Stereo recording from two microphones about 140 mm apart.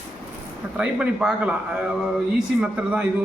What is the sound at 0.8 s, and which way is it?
Speech, 5° right (ahead or behind).